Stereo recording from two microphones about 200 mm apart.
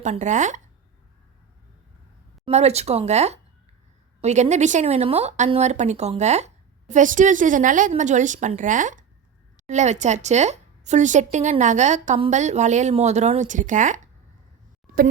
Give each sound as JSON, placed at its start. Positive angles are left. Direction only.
{"t": 0.0, "sound": "speech", "side_deg": -35}
{"t": 2.4, "sound": "speech", "side_deg": -30}